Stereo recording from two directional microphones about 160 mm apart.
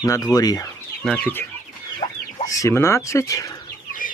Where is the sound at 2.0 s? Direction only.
35° left (ahead or behind).